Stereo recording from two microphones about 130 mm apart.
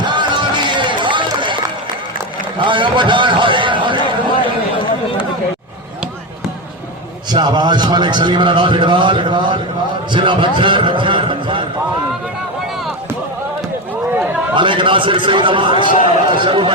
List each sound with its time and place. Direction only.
0.0 s run: 35° right (ahead or behind)
2.6 s a sound: 40° right (ahead or behind)
7.3 s a man's voice: 35° right (ahead or behind)
14.5 s a man's voice: 40° right (ahead or behind)